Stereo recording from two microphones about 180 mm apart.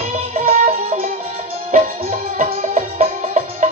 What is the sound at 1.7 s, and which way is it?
Music, 45° right (ahead or behind).